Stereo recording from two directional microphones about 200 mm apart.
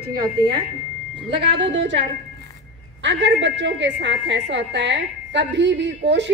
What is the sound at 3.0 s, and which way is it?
A woman's voice, 65° right (ahead or behind).